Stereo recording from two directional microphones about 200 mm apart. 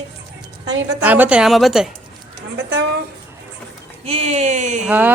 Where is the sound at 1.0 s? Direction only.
10° right (ahead or behind).